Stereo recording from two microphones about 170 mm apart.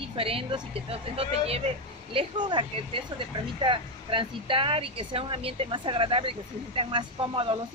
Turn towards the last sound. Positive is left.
turn(degrees=-30)  # may be behind; listen again after turning